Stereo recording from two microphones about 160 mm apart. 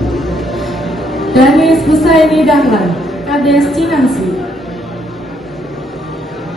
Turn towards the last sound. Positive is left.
turn(degrees=0)  # may be behind; listen again after turning